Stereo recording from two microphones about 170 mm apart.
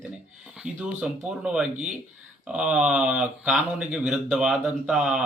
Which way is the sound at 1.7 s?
45° right (ahead or behind).